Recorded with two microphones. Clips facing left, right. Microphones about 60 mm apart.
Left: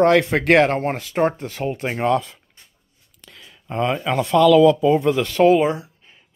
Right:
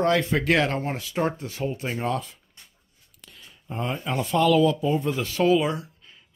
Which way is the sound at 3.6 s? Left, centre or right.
Left.